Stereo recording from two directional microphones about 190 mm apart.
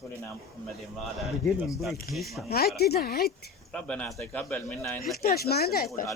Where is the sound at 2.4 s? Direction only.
55° left (ahead or behind).